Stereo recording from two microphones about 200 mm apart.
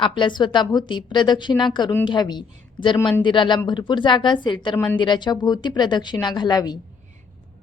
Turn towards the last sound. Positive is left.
turn(degrees=20)  # may be behind; listen again after turning